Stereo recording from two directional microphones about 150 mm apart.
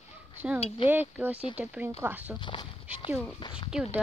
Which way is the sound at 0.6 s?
40° left (ahead or behind).